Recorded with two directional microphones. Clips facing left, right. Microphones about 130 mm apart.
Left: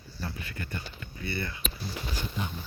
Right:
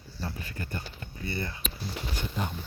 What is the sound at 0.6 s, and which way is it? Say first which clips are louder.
Speech: right 1 dB; 40° right (ahead or behind).